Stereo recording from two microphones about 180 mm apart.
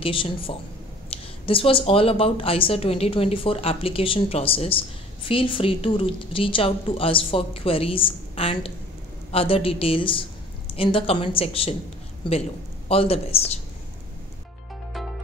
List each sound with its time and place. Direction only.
0.0 s a woman's voice: 30° left (ahead or behind)